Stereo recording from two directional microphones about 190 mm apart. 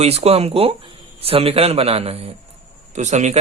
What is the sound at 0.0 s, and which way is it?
A man's voice, 35° right (ahead or behind).